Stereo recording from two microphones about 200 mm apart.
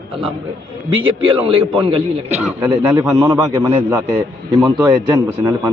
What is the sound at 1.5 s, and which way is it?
Speech, 25° right (ahead or behind).